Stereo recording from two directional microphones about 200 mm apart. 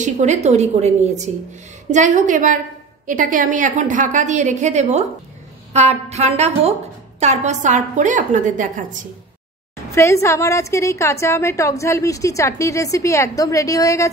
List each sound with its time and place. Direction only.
0.0 s a woman's voice: 35° right (ahead or behind)
9.9 s a woman's voice: 15° left (ahead or behind)